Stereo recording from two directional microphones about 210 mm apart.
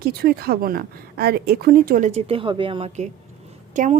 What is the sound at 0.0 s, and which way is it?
Speech, 50° right (ahead or behind).